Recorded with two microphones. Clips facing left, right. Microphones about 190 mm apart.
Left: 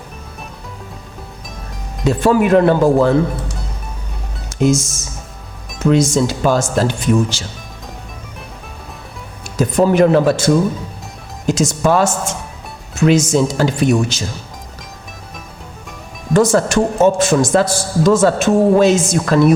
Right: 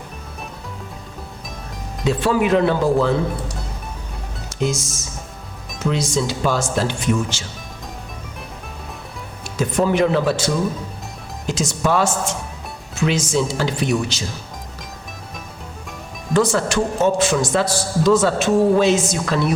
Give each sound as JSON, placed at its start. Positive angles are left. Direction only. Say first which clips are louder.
{"t": 2.0, "sound": "a man's voice", "louder": "left 5 dB", "side_deg": 45}
{"t": 4.6, "sound": "a man's voice", "louder": "left 8 dB", "side_deg": 45}
{"t": 9.6, "sound": "a man's voice", "louder": "left 5 dB", "side_deg": 40}
{"t": 16.3, "sound": "a man's voice", "louder": "left 5 dB", "side_deg": 45}